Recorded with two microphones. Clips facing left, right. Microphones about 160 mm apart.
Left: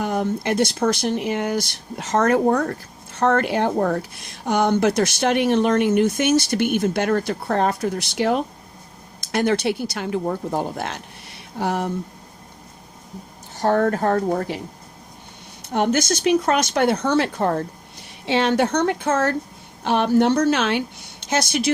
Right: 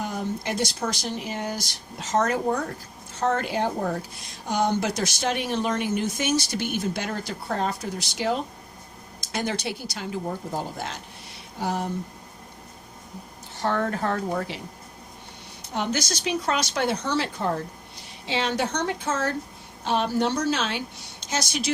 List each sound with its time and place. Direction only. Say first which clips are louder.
0.0 s speech: left 7 dB; 60° left (ahead or behind)
13.6 s speech: left 7 dB; 45° left (ahead or behind)
15.7 s speech: left 8 dB; 55° left (ahead or behind)